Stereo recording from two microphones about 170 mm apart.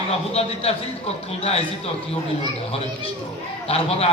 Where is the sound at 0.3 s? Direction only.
35° left (ahead or behind).